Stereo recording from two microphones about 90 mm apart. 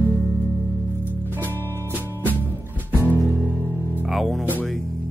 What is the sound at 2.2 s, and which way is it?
Music, 20° right (ahead or behind).